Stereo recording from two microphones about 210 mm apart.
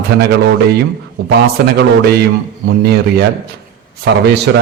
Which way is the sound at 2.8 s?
50° right (ahead or behind).